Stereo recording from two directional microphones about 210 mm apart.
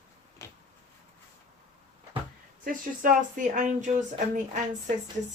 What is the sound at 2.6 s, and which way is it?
Speech, 40° right (ahead or behind).